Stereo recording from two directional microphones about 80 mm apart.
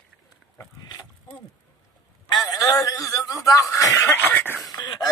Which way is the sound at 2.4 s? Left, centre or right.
Left.